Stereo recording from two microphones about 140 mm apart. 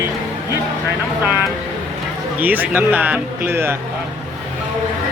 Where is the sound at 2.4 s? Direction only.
10° right (ahead or behind).